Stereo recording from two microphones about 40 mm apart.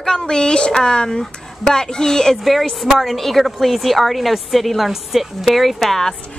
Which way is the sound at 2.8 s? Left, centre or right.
Centre.